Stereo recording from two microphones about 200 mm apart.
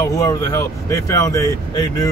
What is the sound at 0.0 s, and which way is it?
Speech, 15° left (ahead or behind).